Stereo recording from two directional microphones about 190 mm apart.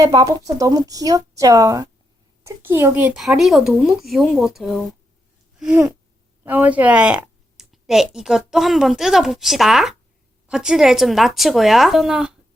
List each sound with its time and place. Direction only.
0.1 s a woman's voice: 20° right (ahead or behind); by 4.8 s centre (ahead or behind)
5.5 s a sound: 5° right (ahead or behind)
6.4 s a woman's voice: 10° right (ahead or behind)